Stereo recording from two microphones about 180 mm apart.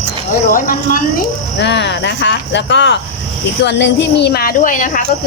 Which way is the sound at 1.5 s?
75° left (ahead or behind).